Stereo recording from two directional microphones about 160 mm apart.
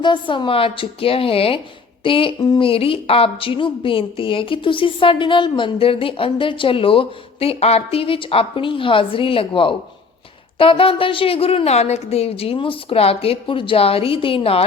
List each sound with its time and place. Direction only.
0.0 s a woman's voice: 30° left (ahead or behind)